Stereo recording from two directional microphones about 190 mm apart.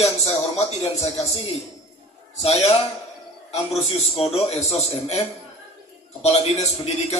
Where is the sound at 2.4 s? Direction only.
35° left (ahead or behind).